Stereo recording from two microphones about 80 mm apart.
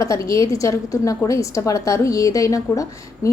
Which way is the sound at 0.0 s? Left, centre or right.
Left.